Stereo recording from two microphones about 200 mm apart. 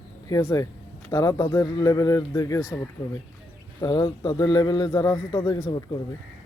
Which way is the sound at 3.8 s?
20° left (ahead or behind).